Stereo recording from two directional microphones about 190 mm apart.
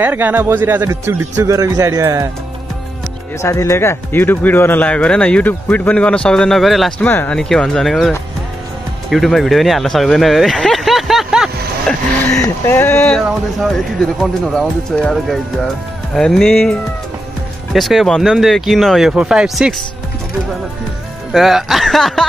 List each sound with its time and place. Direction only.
0.0 s speech: 10° right (ahead or behind)
3.3 s speech: 15° left (ahead or behind)
9.1 s a sound: centre (ahead or behind)
12.3 s speech: 15° left (ahead or behind); by 19.7 s 5° right (ahead or behind)
21.3 s speech: centre (ahead or behind)